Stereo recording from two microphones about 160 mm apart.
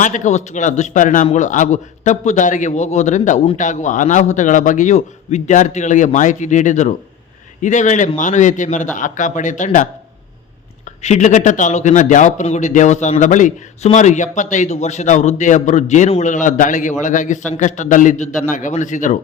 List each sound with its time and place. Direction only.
0.0 s a man's voice: 50° left (ahead or behind)